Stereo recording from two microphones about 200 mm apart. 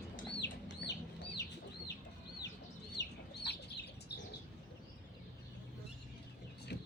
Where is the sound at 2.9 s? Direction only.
60° left (ahead or behind).